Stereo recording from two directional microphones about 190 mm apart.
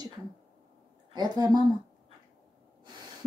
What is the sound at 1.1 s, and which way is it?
Speech, 20° right (ahead or behind).